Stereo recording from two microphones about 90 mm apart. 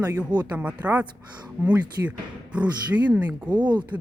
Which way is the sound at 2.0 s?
30° right (ahead or behind).